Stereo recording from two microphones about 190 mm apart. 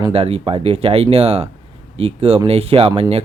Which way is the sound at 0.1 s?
30° right (ahead or behind).